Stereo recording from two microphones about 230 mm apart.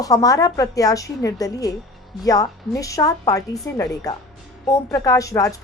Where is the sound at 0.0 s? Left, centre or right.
Centre.